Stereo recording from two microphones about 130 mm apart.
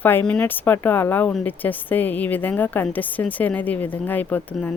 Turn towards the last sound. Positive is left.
turn(degrees=15)  # may be behind; listen again after turning